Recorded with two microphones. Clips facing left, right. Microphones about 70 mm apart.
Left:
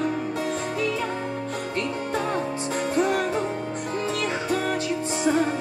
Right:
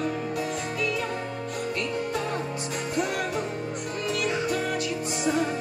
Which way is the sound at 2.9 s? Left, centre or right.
Left.